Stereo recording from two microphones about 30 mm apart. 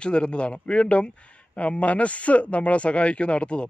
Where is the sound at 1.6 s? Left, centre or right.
Left.